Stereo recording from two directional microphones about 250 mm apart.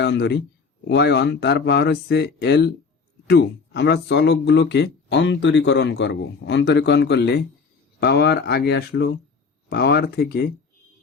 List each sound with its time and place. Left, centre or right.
0.0 s speech: left